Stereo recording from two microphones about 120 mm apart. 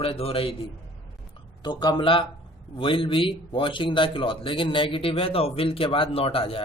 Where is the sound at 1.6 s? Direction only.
35° left (ahead or behind).